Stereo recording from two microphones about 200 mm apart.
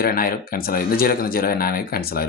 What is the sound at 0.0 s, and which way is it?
Speech, 45° left (ahead or behind).